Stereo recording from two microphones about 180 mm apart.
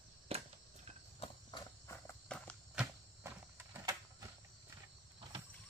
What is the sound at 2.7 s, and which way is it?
Insect, 10° right (ahead or behind).